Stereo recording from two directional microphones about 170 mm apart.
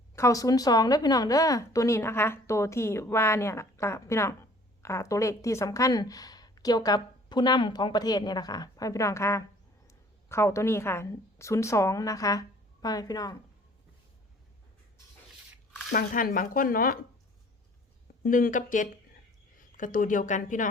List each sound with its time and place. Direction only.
0.2 s a woman's voice: 20° left (ahead or behind)
15.9 s speech: 60° left (ahead or behind)
18.3 s speech: 55° left (ahead or behind)